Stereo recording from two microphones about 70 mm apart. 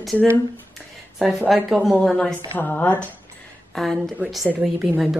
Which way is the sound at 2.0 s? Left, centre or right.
Centre.